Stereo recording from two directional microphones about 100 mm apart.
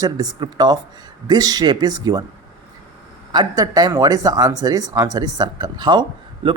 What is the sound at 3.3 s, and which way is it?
Speech, 40° right (ahead or behind).